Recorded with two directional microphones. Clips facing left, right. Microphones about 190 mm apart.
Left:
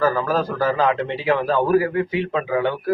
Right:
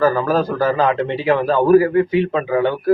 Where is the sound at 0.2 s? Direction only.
35° right (ahead or behind).